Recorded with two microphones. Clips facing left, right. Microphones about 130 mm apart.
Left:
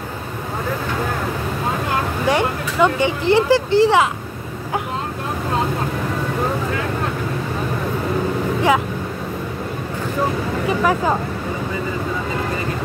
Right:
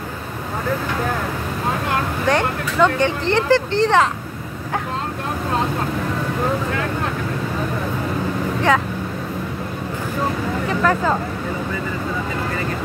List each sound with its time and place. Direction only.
2.2 s speech: 10° left (ahead or behind)
10.7 s speech: 15° left (ahead or behind)